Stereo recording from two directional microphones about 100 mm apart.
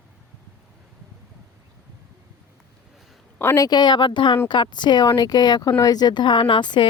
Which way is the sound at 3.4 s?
25° left (ahead or behind).